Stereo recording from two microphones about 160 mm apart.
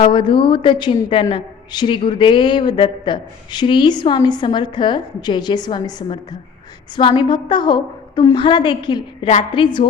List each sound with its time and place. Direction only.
0.0 s a woman's voice: 30° left (ahead or behind)